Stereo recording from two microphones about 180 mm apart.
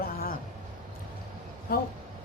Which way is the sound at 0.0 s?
55° left (ahead or behind).